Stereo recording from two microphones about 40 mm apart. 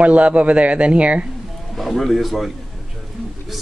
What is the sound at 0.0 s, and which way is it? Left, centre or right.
Speech, right.